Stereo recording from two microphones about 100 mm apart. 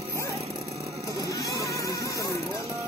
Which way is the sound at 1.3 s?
35° left (ahead or behind).